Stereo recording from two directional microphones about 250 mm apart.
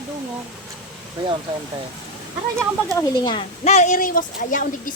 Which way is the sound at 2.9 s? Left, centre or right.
Centre.